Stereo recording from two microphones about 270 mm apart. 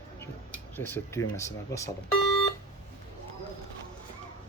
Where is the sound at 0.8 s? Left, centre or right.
Centre.